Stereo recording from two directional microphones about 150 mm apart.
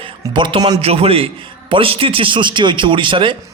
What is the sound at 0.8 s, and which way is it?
A man's voice, 40° right (ahead or behind).